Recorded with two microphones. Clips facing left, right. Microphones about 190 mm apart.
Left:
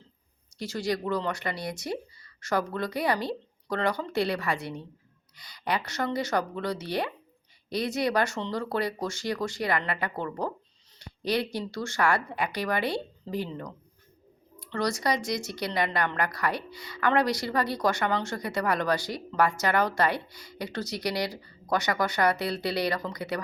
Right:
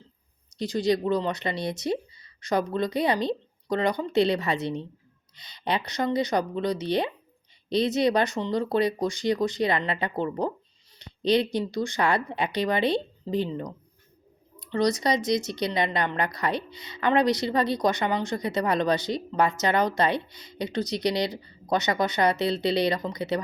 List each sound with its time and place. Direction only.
0.5 s speech: 20° right (ahead or behind)